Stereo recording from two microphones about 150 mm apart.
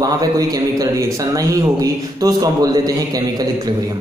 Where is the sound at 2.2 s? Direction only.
25° right (ahead or behind).